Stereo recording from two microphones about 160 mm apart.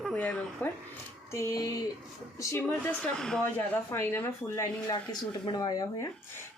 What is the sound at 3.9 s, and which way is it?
Speech, 15° left (ahead or behind).